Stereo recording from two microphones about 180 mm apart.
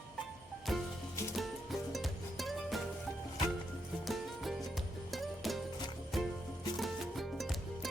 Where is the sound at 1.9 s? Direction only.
Centre (ahead or behind).